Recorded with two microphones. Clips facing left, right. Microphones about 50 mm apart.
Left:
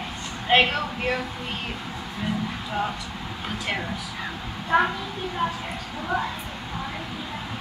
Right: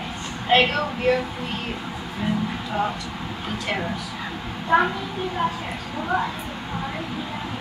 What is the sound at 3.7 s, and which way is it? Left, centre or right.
Speech, centre.